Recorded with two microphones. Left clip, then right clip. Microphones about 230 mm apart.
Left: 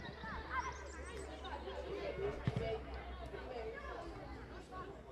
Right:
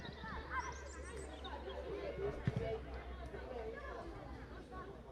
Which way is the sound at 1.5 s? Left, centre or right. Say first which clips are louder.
Left 1 dB; left.